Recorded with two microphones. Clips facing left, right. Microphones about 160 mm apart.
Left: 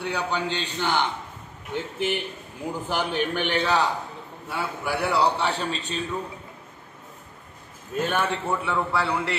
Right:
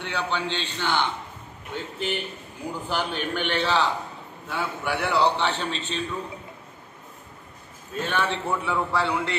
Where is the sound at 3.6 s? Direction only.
15° left (ahead or behind).